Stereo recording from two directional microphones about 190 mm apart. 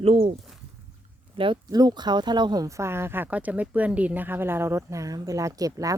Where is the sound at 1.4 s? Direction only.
25° right (ahead or behind).